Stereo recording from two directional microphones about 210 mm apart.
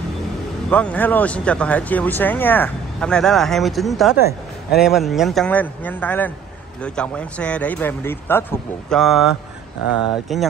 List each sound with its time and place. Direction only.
0.7 s speech: 5° left (ahead or behind)
10.3 s speech: centre (ahead or behind)